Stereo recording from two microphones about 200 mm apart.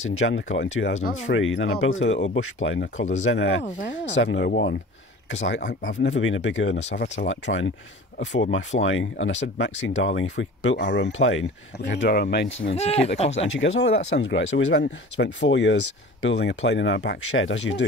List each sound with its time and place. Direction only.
0.0 s speech: 75° left (ahead or behind); by 12.5 s 55° left (ahead or behind)
12.7 s speech: 30° left (ahead or behind)
13.5 s speech: 70° left (ahead or behind)